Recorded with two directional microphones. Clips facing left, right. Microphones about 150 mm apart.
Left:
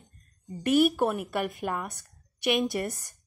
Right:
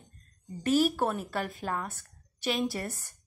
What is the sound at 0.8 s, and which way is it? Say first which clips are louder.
A woman's voice: left 3 dB; 15° left (ahead or behind).